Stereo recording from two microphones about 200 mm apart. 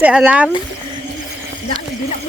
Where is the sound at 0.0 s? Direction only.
5° right (ahead or behind).